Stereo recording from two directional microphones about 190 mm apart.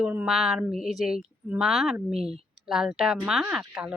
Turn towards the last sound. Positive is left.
turn(degrees=-5)  # may be behind; listen again after turning